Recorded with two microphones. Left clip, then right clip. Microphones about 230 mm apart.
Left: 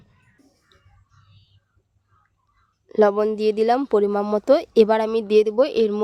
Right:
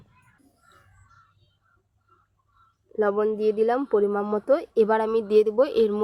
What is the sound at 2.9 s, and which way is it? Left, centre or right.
Speech, left.